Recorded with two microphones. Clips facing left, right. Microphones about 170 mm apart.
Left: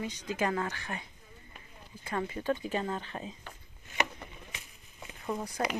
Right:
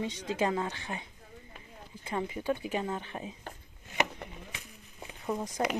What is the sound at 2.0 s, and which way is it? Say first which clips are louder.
A woman's voice: even; 15° right (ahead or behind).